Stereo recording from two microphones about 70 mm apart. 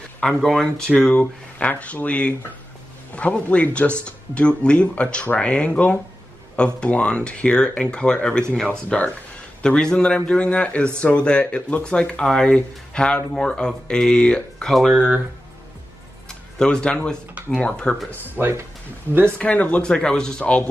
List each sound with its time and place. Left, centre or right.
0.2 s speech: centre
1.1 s speech: left
14.7 s speech: centre
16.3 s a sound: centre
17.6 s speech: centre
18.4 s speech: right
19.3 s speech: left